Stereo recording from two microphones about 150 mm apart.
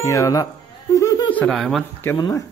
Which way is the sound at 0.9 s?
20° left (ahead or behind).